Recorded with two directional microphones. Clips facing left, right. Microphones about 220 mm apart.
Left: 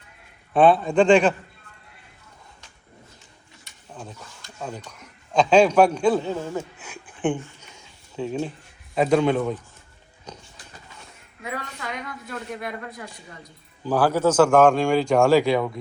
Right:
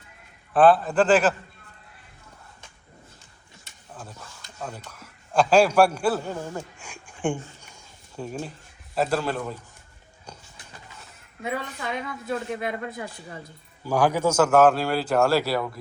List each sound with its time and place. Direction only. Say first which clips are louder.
0.5 s speech: left 1 dB; centre (ahead or behind)
4.7 s a man's voice: left 4 dB; 5° right (ahead or behind)
6.8 s a sound: left 2 dB; 10° right (ahead or behind)
9.0 s speech: left 6 dB; 5° right (ahead or behind)
11.4 s a woman's voice: right 3 dB; 25° right (ahead or behind)
13.4 s a man's voice: left 4 dB; 10° right (ahead or behind)